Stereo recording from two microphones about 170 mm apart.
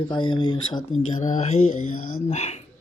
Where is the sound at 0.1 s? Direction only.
25° left (ahead or behind).